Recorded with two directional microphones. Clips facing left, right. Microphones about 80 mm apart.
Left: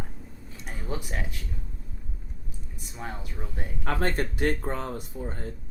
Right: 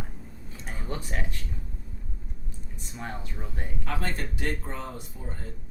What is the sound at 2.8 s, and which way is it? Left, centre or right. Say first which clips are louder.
Speech: even; centre.